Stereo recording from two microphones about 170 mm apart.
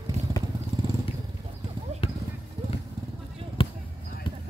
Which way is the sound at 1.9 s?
40° right (ahead or behind).